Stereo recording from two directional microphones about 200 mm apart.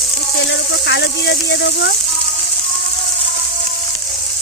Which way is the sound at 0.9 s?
60° left (ahead or behind).